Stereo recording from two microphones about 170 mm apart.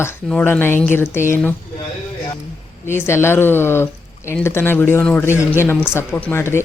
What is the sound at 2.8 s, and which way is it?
Speech, 15° left (ahead or behind).